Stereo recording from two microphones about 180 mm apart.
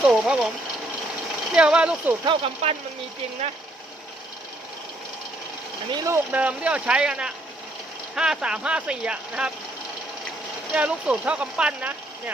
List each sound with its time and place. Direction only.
0.0 s speech: 5° right (ahead or behind)
1.5 s speech: 5° right (ahead or behind)
2.2 s speech: 30° right (ahead or behind)
5.9 s speech: 15° right (ahead or behind)
10.7 s speech: 5° right (ahead or behind)